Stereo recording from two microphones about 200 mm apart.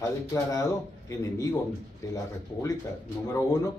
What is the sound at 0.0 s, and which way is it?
Speech, 15° left (ahead or behind).